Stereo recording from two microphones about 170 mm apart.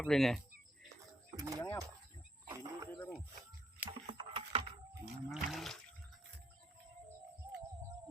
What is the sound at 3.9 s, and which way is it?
Typing, 30° right (ahead or behind).